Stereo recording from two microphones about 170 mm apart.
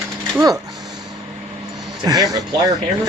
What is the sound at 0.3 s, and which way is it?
Speech, 20° right (ahead or behind).